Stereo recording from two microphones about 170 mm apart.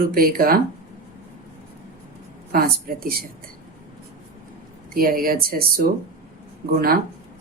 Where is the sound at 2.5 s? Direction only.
60° right (ahead or behind).